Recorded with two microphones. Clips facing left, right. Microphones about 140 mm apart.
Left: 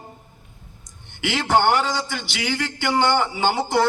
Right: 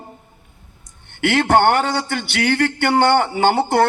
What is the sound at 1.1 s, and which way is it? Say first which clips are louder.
A man's voice: right 5 dB; 60° right (ahead or behind).